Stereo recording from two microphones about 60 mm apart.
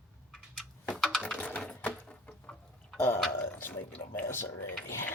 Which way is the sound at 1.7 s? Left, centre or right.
Left.